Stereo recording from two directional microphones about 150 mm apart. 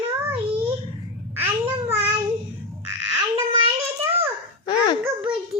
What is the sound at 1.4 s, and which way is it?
Babbling, 15° right (ahead or behind).